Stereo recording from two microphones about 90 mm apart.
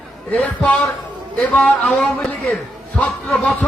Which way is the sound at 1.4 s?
15° left (ahead or behind).